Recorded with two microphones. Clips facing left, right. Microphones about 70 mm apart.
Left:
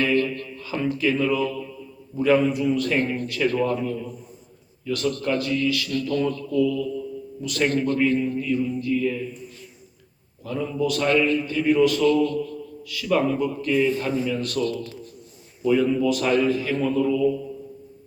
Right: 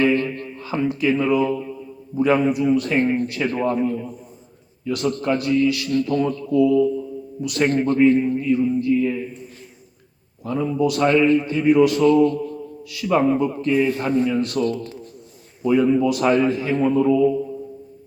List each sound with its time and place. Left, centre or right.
0.0 s a man's voice: right
10.4 s a man's voice: right